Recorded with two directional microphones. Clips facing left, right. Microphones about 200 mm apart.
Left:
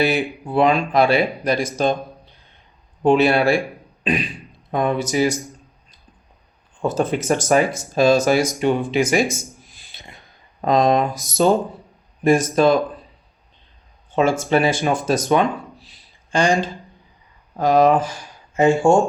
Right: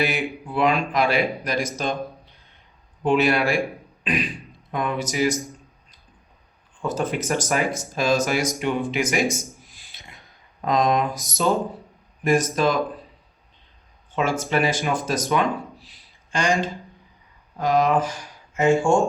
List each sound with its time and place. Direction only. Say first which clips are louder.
0.0 s speech: left 5 dB; 30° left (ahead or behind)
3.0 s speech: left 5 dB; 30° left (ahead or behind)
4.0 s beatboxing: left 3 dB; 25° left (ahead or behind)
4.7 s speech: left 6 dB; 35° left (ahead or behind)
6.8 s speech: left 5 dB; 30° left (ahead or behind)
9.9 s a sound: left 5 dB; 30° left (ahead or behind)
10.7 s speech: left 4 dB; 30° left (ahead or behind)
14.2 s speech: left 5 dB; 30° left (ahead or behind)